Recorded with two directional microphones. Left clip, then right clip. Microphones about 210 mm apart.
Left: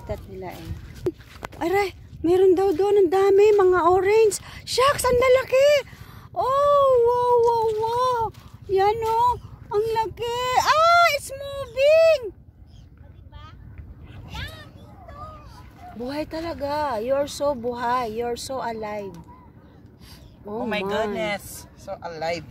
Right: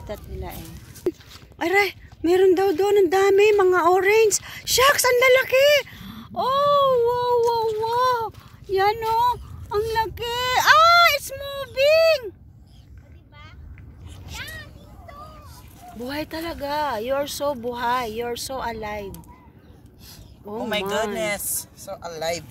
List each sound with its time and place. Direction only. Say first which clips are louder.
0.1 s speech: left 1 dB; centre (ahead or behind)
7.9 s clip-clop: right 1 dB; centre (ahead or behind)
8.7 s speech: even; centre (ahead or behind)
16.1 s speech: even; 5° left (ahead or behind)
21.2 s speech: right 1 dB; 35° right (ahead or behind)